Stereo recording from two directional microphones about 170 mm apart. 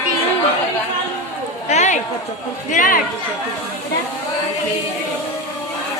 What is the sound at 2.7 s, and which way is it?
Speech, 50° left (ahead or behind).